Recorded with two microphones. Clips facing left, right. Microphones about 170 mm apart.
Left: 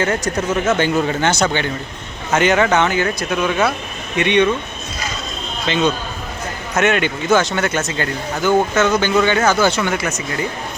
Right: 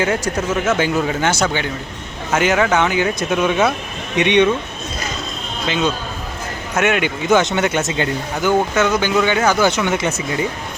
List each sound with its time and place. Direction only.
0.0 s speech: 10° right (ahead or behind)
5.6 s speech: 5° right (ahead or behind); by 10.4 s 20° right (ahead or behind)